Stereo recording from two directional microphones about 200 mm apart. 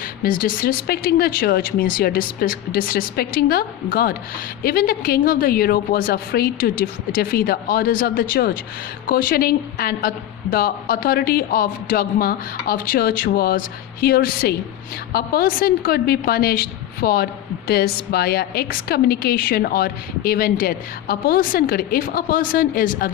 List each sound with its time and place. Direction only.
0.0 s speech: 45° left (ahead or behind)